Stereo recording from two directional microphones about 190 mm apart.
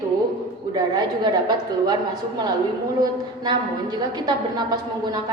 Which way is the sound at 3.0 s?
20° right (ahead or behind).